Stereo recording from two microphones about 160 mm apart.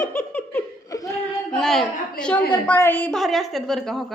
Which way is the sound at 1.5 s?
5° left (ahead or behind).